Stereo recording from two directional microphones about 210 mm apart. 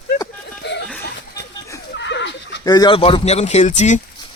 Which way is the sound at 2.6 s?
20° left (ahead or behind).